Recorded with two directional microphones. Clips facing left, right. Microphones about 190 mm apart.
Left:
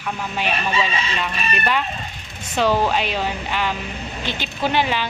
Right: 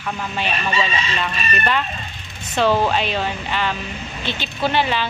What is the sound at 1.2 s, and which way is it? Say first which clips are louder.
Speech: right 1 dB; 5° left (ahead or behind).